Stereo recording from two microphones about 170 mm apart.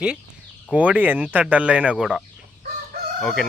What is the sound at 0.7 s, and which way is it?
Speech, 10° right (ahead or behind).